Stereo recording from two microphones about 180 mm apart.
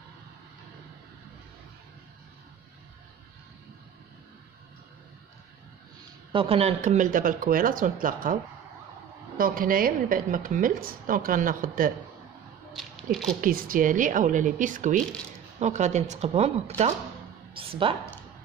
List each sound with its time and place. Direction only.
6.3 s a woman's voice: 30° right (ahead or behind); by 8.4 s 50° right (ahead or behind)
9.4 s a woman's voice: 50° right (ahead or behind)
12.7 s speech: centre (ahead or behind)
13.4 s a woman's voice: 50° right (ahead or behind); by 17.9 s 30° right (ahead or behind)